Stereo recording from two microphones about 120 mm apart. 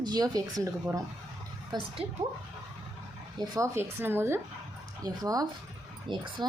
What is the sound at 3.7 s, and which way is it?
Speech, 20° right (ahead or behind).